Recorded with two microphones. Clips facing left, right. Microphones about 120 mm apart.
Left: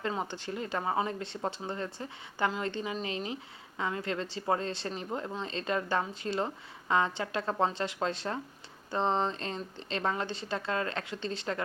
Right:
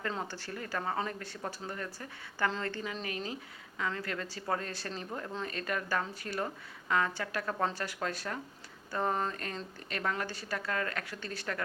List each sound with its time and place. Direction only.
0.2 s a woman's voice: 20° left (ahead or behind)